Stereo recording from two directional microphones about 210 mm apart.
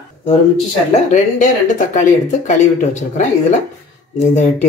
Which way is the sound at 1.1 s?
35° left (ahead or behind).